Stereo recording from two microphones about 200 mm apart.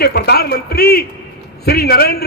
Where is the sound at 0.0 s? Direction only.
50° left (ahead or behind).